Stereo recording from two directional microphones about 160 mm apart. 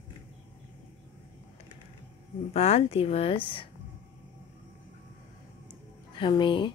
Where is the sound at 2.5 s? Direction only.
40° left (ahead or behind).